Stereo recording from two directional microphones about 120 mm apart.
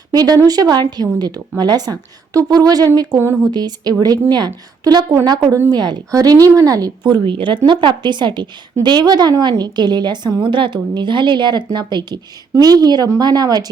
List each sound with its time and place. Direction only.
0.1 s a woman's voice: 30° right (ahead or behind)
3.2 s speech: 20° right (ahead or behind)
3.5 s a woman's voice: 35° right (ahead or behind)